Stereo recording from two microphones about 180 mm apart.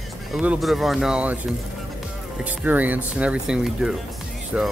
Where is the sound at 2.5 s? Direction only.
10° right (ahead or behind).